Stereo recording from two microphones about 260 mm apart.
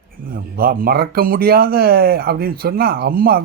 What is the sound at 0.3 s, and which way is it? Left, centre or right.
Speech, right.